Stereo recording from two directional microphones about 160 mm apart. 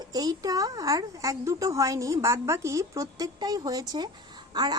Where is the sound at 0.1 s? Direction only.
25° right (ahead or behind).